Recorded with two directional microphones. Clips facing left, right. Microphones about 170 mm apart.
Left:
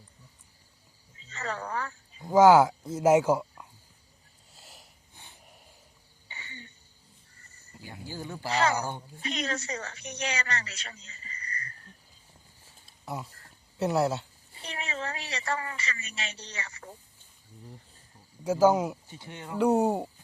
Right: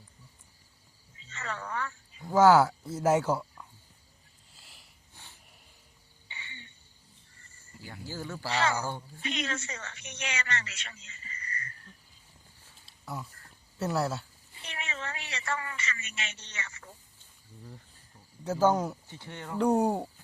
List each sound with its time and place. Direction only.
1.2 s a sound: 35° left (ahead or behind)
2.2 s speech: 15° left (ahead or behind)
4.5 s sniff: 40° left (ahead or behind)
5.1 s snort: 15° left (ahead or behind)
6.2 s cricket: 40° left (ahead or behind)
7.9 s speech: 15° left (ahead or behind)
8.4 s a woman's voice: 40° left (ahead or behind)
8.7 s speech: 15° left (ahead or behind)
9.2 s a woman's voice: 35° left (ahead or behind)
13.7 s speech: 20° left (ahead or behind)
14.5 s a woman's voice: 35° left (ahead or behind)
18.4 s speech: 10° left (ahead or behind)
19.5 s speech: 5° left (ahead or behind)